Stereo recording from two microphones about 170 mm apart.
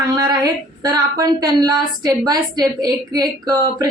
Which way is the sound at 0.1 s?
25° right (ahead or behind).